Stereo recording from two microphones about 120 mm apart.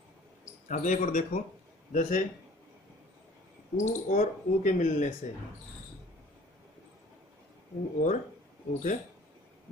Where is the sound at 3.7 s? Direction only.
90° left.